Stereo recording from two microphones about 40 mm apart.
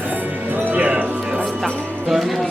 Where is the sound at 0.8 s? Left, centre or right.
Right.